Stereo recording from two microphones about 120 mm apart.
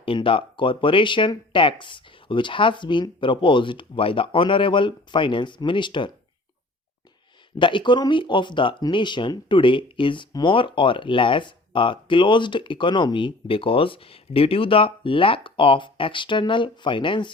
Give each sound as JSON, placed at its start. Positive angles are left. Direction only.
{"t": 0.0, "sound": "speech", "side_deg": 45}
{"t": 7.6, "sound": "speech", "side_deg": 40}